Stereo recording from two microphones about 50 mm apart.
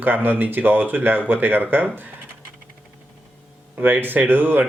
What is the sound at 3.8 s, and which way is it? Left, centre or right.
Speech, right.